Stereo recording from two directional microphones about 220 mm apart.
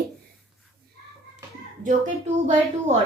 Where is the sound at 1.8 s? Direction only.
30° right (ahead or behind).